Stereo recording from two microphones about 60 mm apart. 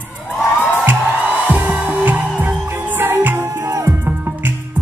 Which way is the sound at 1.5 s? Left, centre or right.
Right.